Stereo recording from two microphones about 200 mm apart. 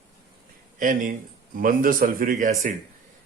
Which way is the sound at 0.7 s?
40° right (ahead or behind).